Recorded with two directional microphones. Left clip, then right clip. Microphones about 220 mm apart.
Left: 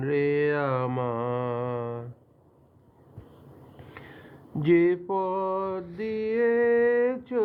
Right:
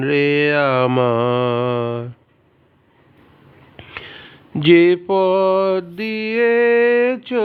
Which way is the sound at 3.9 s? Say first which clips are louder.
Right 13 dB; 45° right (ahead or behind).